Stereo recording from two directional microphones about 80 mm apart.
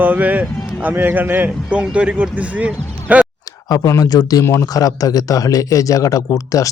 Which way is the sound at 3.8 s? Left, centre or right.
Left.